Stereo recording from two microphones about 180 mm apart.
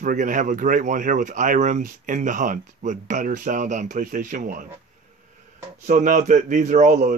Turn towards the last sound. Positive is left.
turn(degrees=-45)  # may be behind; listen again after turning